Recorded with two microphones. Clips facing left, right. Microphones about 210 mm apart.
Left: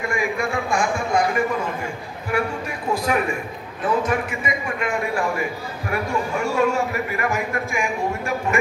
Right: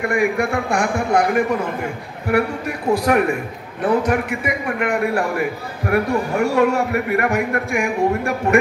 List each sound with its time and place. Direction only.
0.0 s a man's voice: 60° right (ahead or behind)